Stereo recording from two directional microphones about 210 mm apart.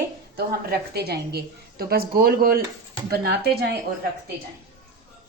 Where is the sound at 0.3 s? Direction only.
50° right (ahead or behind).